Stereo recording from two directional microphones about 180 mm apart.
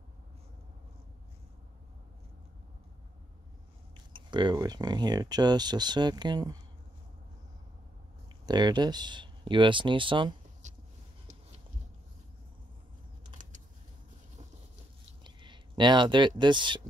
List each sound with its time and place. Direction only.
4.1 s speech: 25° right (ahead or behind)
8.5 s speech: 25° right (ahead or behind)
10.6 s vehicle: 40° right (ahead or behind)
15.2 s speech: 25° right (ahead or behind)